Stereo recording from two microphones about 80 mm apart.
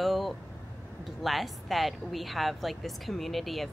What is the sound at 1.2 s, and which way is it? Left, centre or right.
Speech, centre.